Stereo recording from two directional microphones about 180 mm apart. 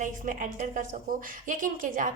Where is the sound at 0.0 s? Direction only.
45° right (ahead or behind).